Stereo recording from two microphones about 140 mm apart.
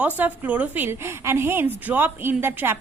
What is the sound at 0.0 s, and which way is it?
A woman's voice, 10° right (ahead or behind).